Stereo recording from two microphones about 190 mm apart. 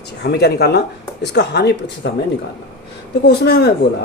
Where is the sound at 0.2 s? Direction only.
60° left (ahead or behind).